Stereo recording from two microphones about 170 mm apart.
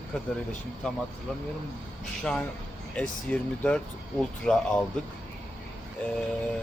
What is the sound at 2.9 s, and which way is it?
Speech, 5° left (ahead or behind).